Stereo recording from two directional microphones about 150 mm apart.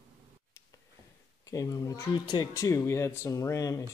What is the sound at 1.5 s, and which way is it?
Speech, 25° left (ahead or behind).